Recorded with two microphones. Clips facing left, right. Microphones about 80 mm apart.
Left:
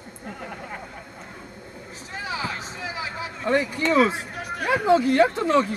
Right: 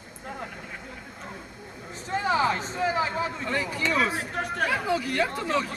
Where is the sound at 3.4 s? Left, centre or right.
Left.